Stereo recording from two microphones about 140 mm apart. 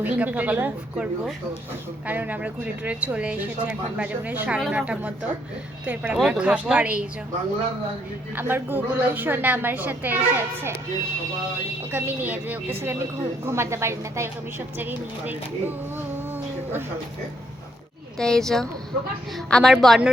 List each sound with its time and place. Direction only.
0.0 s speech: 10° right (ahead or behind)
8.4 s speech: 15° right (ahead or behind)
11.9 s speech: 15° right (ahead or behind)
18.2 s speech: 5° left (ahead or behind)